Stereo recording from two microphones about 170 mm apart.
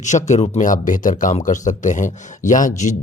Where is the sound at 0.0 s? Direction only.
45° left (ahead or behind).